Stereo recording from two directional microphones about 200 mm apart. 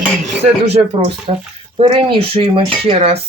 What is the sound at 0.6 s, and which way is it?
Speech, 30° right (ahead or behind).